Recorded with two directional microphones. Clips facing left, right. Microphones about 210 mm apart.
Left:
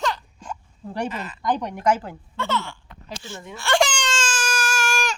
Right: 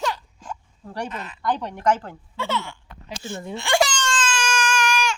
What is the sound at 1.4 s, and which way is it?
Speech, 15° left (ahead or behind).